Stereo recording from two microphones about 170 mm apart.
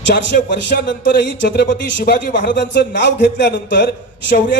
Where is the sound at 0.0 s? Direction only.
90° left.